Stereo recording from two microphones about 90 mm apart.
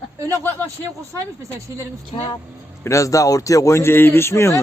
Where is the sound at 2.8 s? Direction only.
35° left (ahead or behind).